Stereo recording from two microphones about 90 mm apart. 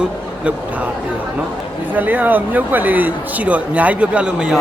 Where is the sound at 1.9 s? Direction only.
20° right (ahead or behind).